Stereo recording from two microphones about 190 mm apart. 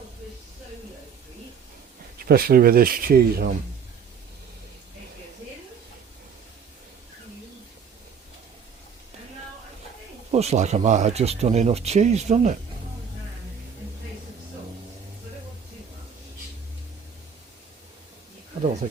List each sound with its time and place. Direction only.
2.1 s speech: 50° right (ahead or behind)
10.3 s speech: 35° right (ahead or behind)